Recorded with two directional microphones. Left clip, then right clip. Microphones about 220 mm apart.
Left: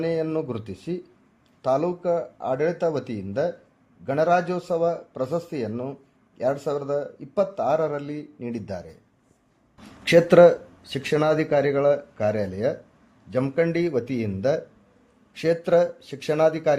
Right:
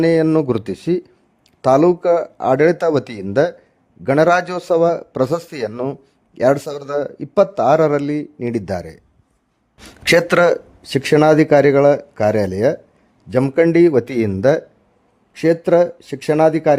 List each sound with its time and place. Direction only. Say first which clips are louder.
0.0 s speech: right 11 dB; 50° right (ahead or behind)